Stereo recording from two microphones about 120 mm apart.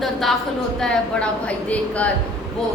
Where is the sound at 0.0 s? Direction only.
Centre (ahead or behind).